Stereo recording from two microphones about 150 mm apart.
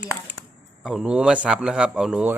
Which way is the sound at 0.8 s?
5° right (ahead or behind).